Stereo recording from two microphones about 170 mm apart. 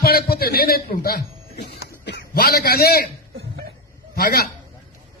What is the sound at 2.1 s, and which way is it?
A man's voice, 75° left (ahead or behind).